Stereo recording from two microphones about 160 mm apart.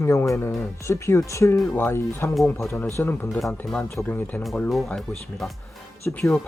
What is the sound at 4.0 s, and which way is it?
Speech, 10° left (ahead or behind).